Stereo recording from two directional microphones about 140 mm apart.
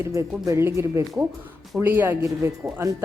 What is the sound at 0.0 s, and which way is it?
A woman's voice, 20° right (ahead or behind).